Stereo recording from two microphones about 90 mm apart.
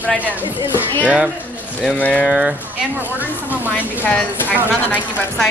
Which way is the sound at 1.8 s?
10° left (ahead or behind).